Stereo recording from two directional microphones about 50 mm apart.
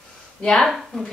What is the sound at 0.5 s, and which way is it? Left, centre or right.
Speech, centre.